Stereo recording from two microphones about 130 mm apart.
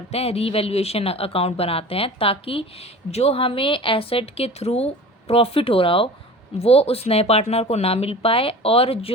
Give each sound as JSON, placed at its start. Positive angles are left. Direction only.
{"t": 0.1, "sound": "speech", "side_deg": 50}